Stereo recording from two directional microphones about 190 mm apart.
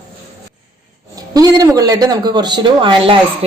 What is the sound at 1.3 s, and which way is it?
Speech, 20° right (ahead or behind).